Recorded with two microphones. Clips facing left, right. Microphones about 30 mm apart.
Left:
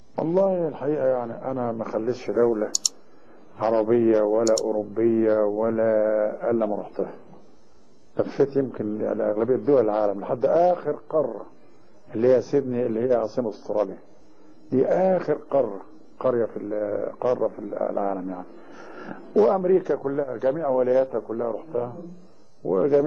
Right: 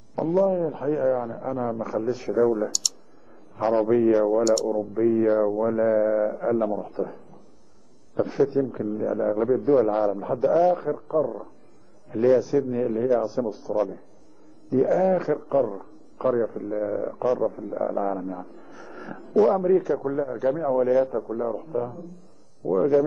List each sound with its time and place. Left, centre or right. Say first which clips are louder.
0.1 s a man's voice: even; centre
4.6 s a man's voice: left 1 dB; centre